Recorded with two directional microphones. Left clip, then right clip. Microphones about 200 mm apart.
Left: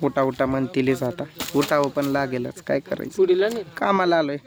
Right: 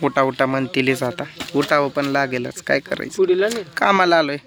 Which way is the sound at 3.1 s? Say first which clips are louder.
Right 2 dB; 35° right (ahead or behind).